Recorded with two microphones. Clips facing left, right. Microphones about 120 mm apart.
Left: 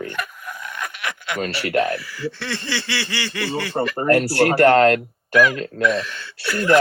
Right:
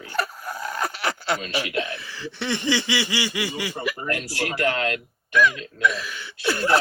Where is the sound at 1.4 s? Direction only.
60° left (ahead or behind).